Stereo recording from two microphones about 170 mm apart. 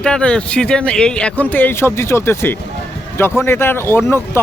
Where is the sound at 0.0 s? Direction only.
5° left (ahead or behind).